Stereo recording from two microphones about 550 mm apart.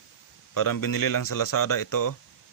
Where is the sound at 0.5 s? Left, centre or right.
Left.